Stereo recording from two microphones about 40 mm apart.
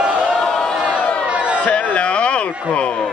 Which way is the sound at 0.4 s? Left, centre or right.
Centre.